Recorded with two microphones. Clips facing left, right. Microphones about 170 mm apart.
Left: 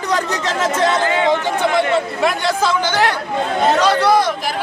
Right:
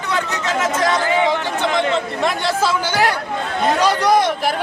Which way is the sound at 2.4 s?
5° right (ahead or behind).